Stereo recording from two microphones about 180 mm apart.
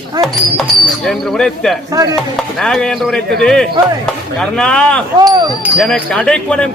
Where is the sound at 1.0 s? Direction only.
Centre (ahead or behind).